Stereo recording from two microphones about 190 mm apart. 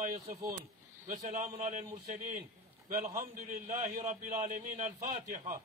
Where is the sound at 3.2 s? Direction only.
40° right (ahead or behind).